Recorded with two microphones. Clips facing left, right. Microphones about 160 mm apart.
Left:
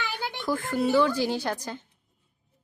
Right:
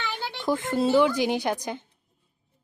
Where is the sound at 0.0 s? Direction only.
15° left (ahead or behind).